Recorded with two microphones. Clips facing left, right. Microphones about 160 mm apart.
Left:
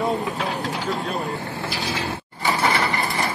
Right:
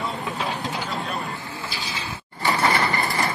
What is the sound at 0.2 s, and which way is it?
Vehicle, centre (ahead or behind).